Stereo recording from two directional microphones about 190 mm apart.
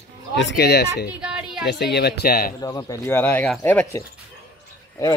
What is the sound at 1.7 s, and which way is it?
Speech, 60° left (ahead or behind).